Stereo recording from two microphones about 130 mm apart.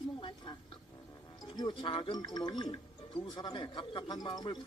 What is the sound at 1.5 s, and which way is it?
Speech, 35° left (ahead or behind).